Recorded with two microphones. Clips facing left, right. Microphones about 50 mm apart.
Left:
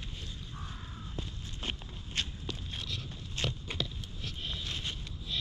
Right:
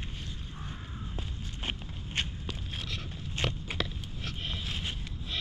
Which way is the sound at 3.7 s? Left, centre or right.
Right.